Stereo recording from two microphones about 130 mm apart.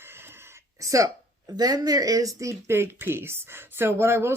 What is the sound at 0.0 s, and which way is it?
Speech, 15° right (ahead or behind).